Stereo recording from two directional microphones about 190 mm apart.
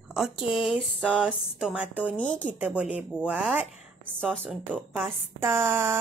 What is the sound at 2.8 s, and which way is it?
Speech, 5° right (ahead or behind).